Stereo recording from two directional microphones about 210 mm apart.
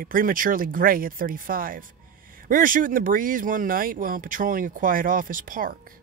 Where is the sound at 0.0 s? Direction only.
40° right (ahead or behind).